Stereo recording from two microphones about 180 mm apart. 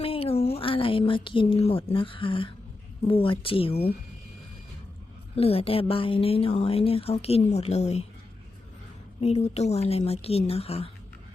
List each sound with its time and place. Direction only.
0.0 s a woman's voice: 30° left (ahead or behind)
5.4 s a woman's voice: 35° left (ahead or behind)
9.2 s a woman's voice: 35° left (ahead or behind)